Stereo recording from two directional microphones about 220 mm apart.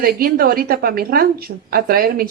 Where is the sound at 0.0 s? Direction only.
40° right (ahead or behind).